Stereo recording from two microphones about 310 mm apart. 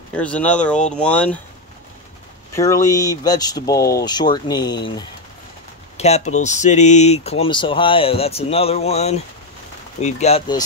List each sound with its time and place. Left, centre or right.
0.1 s speech: centre
2.5 s speech: centre